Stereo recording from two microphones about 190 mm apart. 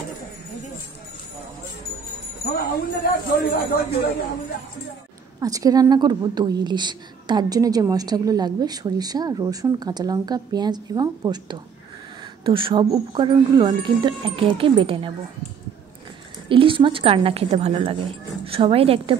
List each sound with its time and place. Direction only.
2.5 s speech: 55° left (ahead or behind)
5.4 s a woman's voice: 20° right (ahead or behind)
16.4 s a woman's voice: 25° right (ahead or behind)